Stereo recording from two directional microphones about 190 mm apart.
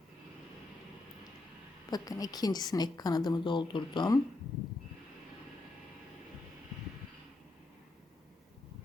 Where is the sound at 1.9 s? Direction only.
20° left (ahead or behind).